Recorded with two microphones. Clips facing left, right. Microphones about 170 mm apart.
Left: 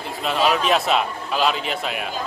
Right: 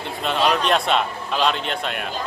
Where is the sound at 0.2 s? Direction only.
Centre (ahead or behind).